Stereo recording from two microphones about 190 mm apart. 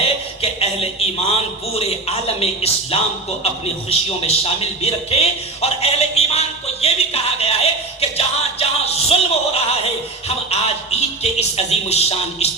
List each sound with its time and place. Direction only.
0.0 s a man's voice: 30° left (ahead or behind)
8.1 s music: 30° left (ahead or behind)
11.2 s speech: 35° left (ahead or behind)